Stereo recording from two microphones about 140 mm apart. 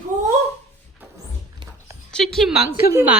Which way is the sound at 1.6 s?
35° right (ahead or behind).